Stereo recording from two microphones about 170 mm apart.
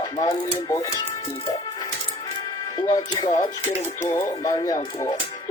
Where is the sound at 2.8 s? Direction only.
25° left (ahead or behind).